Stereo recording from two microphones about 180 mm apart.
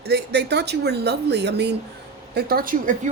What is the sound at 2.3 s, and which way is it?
Speech, 60° right (ahead or behind).